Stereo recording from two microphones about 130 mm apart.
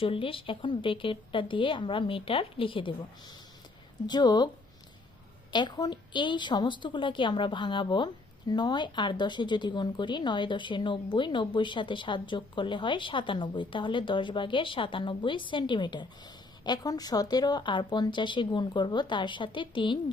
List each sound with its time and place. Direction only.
0.0 s a woman's voice: 45° left (ahead or behind)
4.0 s a woman's voice: 35° left (ahead or behind)
5.5 s a woman's voice: 35° left (ahead or behind)